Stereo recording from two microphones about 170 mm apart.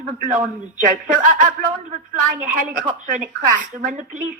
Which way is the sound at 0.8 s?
50° right (ahead or behind).